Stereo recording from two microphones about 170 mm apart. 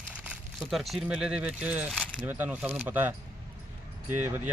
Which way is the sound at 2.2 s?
10° right (ahead or behind).